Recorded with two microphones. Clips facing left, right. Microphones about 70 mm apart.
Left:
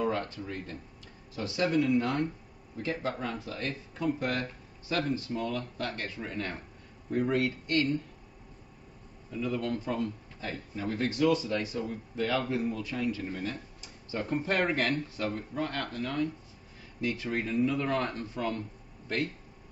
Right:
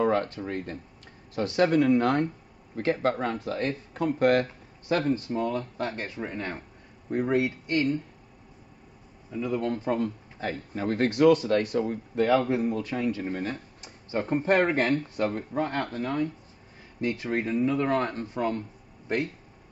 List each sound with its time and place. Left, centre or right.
0.0 s speech: right
4.9 s speech: right
9.3 s speech: right
10.7 s speech: right